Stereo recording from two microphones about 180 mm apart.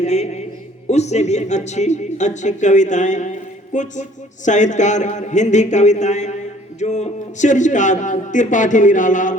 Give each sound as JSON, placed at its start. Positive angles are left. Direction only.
{"t": 0.0, "sound": "a man's voice", "side_deg": 40}